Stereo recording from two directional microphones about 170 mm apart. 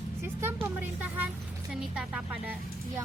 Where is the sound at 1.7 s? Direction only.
5° right (ahead or behind).